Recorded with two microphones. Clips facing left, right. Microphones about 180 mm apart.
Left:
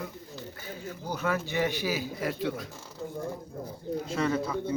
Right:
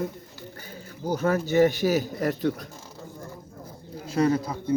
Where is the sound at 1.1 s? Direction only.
40° right (ahead or behind).